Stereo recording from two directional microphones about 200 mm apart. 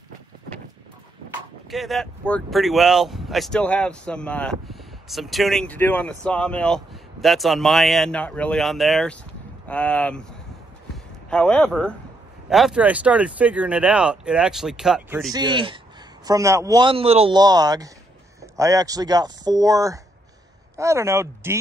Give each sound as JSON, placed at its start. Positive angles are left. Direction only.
{"t": 1.7, "sound": "speech", "side_deg": 0}
{"t": 11.2, "sound": "speech", "side_deg": 5}
{"t": 15.3, "sound": "a man's voice", "side_deg": -20}